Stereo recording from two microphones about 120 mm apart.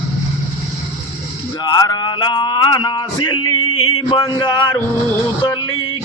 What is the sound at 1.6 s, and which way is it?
Music, 35° left (ahead or behind).